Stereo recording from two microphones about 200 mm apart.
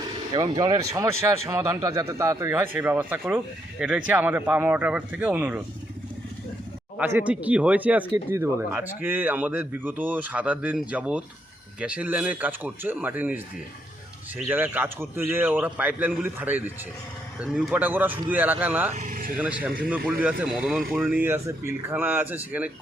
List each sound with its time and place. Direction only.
0.3 s speech: 20° right (ahead or behind)
7.2 s speech: 5° right (ahead or behind)
18.9 s vehicle: 40° right (ahead or behind)
19.4 s speech: 5° right (ahead or behind)